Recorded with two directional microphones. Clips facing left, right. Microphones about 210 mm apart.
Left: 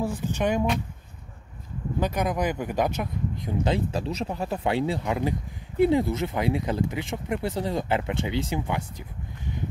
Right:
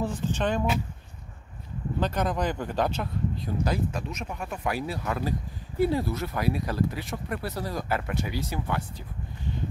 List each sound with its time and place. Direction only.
0.0 s speech: 15° left (ahead or behind)
2.0 s speech: 10° left (ahead or behind)